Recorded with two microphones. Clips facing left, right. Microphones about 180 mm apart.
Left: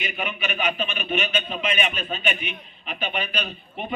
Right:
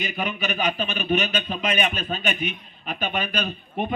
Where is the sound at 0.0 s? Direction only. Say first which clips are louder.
Right 2 dB; 40° right (ahead or behind).